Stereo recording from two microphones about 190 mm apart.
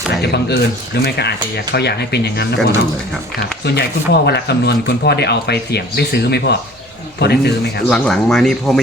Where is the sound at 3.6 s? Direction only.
60° left (ahead or behind).